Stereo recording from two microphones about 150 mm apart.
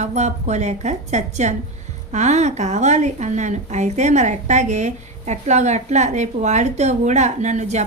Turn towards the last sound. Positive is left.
turn(degrees=-50)  # may be behind; listen again after turning